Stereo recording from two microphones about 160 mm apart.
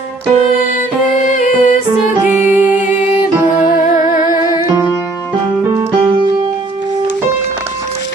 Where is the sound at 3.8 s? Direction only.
60° left (ahead or behind).